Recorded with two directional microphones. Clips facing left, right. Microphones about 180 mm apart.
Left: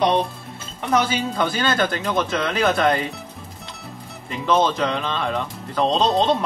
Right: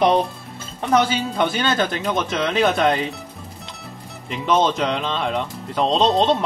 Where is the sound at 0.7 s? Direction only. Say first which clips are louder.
Right 2 dB; 25° right (ahead or behind).